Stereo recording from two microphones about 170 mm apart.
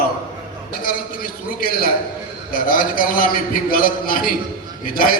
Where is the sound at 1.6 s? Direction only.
60° left (ahead or behind).